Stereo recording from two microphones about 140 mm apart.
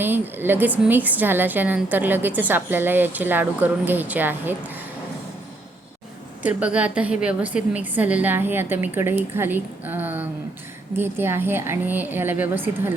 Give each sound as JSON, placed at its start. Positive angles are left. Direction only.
{"t": 0.0, "sound": "a woman's voice", "side_deg": -15}
{"t": 6.4, "sound": "a woman's voice", "side_deg": -10}